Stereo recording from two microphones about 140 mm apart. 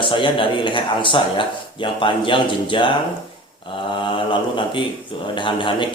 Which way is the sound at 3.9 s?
35° left (ahead or behind).